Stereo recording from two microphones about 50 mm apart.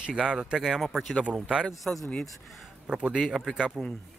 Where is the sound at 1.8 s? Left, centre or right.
Centre.